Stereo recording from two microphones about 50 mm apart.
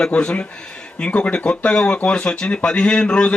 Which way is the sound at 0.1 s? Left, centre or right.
Left.